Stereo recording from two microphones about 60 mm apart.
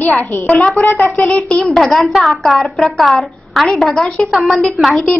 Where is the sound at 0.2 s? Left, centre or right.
Left.